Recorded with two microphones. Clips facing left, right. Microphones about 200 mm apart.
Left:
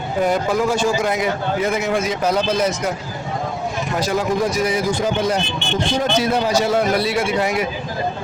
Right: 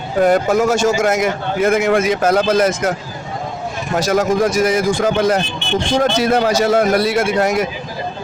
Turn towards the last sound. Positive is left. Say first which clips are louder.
# right 4 dB
turn(degrees=-45)  # may be behind; listen again after turning